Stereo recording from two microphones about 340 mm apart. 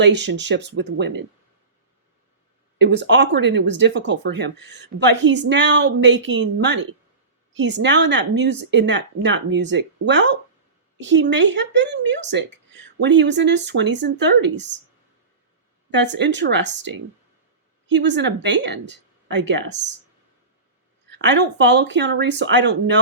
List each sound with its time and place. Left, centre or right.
0.0 s speech: right
2.7 s speech: right
15.9 s speech: right
21.1 s speech: right